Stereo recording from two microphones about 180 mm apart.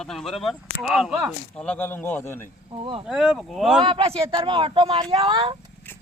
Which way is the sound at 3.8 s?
30° right (ahead or behind).